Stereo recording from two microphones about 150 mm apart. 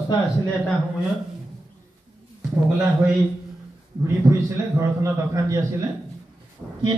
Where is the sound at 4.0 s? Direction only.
15° right (ahead or behind).